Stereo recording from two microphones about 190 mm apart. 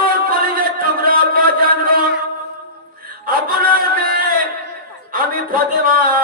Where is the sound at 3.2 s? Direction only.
50° right (ahead or behind).